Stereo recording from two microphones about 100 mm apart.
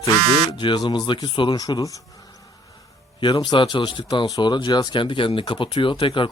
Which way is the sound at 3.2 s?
50° left (ahead or behind).